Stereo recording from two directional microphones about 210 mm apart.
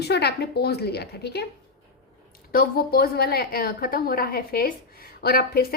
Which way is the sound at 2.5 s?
45° left (ahead or behind).